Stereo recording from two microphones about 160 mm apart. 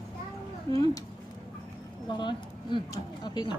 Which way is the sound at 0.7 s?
20° left (ahead or behind).